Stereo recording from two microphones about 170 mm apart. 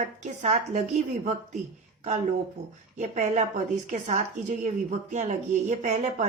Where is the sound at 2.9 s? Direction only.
45° right (ahead or behind).